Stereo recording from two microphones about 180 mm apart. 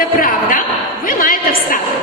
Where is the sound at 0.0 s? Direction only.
50° left (ahead or behind).